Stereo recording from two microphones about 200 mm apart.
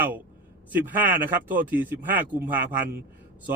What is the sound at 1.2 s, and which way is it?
Speech, 10° right (ahead or behind).